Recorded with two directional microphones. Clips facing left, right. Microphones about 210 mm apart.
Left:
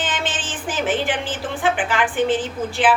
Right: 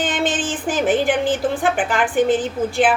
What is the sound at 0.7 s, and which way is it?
A woman's voice, 45° right (ahead or behind).